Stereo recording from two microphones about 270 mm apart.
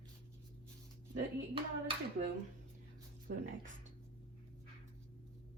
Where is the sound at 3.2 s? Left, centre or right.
Right.